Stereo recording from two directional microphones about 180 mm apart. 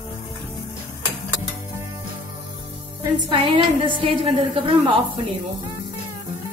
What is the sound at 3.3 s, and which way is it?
Speech, 25° right (ahead or behind).